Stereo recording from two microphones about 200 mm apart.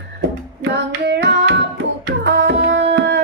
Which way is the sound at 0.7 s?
60° right (ahead or behind).